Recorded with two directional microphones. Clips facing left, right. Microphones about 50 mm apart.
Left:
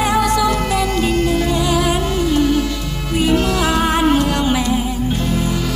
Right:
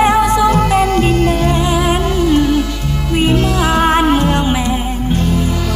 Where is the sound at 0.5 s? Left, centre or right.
Right.